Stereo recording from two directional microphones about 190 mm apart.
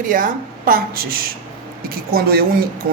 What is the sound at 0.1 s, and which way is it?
A woman's voice, 50° right (ahead or behind).